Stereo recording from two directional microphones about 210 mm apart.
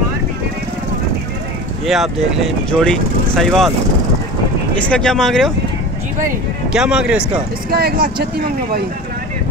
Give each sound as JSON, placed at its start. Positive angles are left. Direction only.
{"t": 2.7, "sound": "speech", "side_deg": 5}
{"t": 4.7, "sound": "speech", "side_deg": 5}
{"t": 6.7, "sound": "speech", "side_deg": -5}
{"t": 7.7, "sound": "speech", "side_deg": -50}